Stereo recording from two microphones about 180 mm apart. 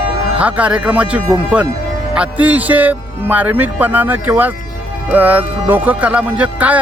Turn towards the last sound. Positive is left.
turn(degrees=-10)  # may be behind; listen again after turning